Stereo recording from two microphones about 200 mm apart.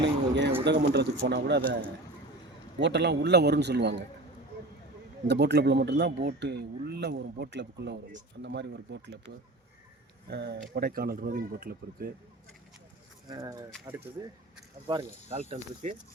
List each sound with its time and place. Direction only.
0.0 s a sound: 60° right (ahead or behind)
0.6 s speech: 55° right (ahead or behind)
2.8 s speech: 60° right (ahead or behind)
5.3 s speech: 55° right (ahead or behind)
10.2 s speech: 55° right (ahead or behind)
13.2 s speech: 15° right (ahead or behind)
14.8 s speech: 25° right (ahead or behind)